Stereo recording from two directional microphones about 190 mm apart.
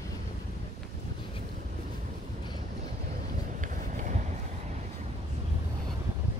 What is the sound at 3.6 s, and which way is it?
Vehicle, 40° right (ahead or behind).